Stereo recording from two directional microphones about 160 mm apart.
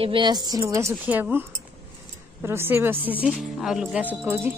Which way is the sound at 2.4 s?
15° right (ahead or behind).